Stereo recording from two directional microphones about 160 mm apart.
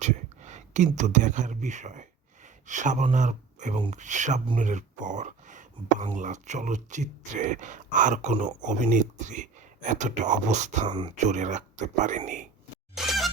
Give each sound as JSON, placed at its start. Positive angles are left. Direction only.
{"t": 0.0, "sound": "a sound", "side_deg": -50}
{"t": 0.9, "sound": "speech", "side_deg": -50}
{"t": 10.8, "sound": "speech", "side_deg": -30}
{"t": 11.3, "sound": "speech", "side_deg": -50}
{"t": 13.0, "sound": "music", "side_deg": 0}